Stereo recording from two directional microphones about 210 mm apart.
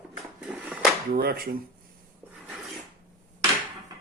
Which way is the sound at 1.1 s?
45° right (ahead or behind).